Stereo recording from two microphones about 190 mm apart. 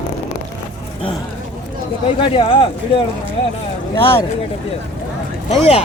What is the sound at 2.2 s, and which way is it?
Speech, 25° left (ahead or behind).